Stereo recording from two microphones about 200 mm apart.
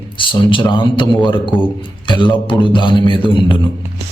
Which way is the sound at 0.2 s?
25° left (ahead or behind).